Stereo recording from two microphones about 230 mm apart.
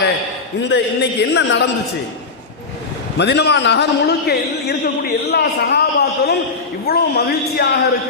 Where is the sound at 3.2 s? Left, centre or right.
Left.